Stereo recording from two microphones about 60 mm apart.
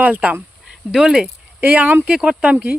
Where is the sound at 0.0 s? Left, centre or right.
Right.